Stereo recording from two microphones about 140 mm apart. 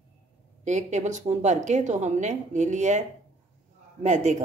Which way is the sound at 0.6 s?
60° right (ahead or behind).